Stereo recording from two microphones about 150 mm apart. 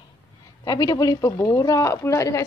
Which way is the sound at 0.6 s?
25° left (ahead or behind).